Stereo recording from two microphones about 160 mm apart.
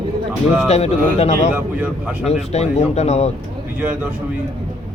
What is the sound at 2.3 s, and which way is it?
Speech, 40° left (ahead or behind).